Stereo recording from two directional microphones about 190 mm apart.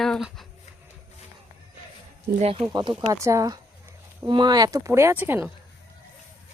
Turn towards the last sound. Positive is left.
turn(degrees=-10)  # may be behind; listen again after turning